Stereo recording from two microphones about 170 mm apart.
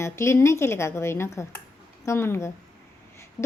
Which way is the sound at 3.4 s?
Centre (ahead or behind).